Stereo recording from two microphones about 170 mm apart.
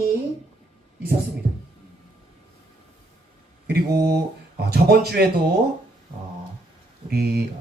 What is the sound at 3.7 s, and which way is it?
Speech, 70° right (ahead or behind).